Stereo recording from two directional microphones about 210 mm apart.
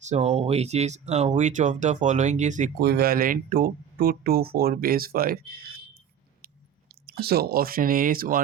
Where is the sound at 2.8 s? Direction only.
50° right (ahead or behind).